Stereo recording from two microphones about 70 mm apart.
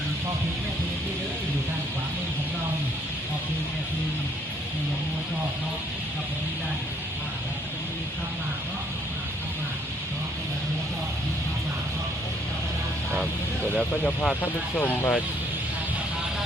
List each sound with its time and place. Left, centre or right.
13.7 s speech: centre
14.4 s speech: left